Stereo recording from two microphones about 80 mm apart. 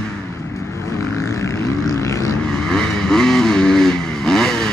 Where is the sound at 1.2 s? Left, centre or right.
Left.